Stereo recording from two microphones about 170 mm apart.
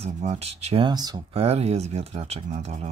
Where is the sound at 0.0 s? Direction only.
40° right (ahead or behind).